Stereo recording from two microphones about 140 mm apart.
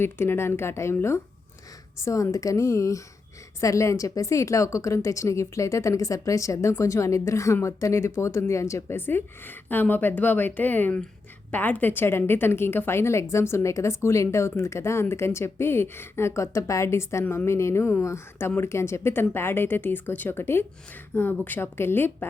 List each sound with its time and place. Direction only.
0.0 s a woman's voice: 15° left (ahead or behind)